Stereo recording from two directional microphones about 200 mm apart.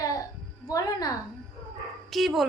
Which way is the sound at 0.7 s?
20° left (ahead or behind).